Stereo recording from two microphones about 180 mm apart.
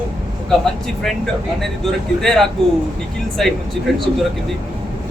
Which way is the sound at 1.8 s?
Centre (ahead or behind).